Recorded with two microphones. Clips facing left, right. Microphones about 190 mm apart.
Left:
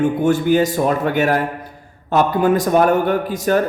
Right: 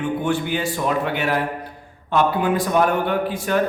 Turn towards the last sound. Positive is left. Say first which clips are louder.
# left 4 dB
turn(degrees=40)  # may be behind; listen again after turning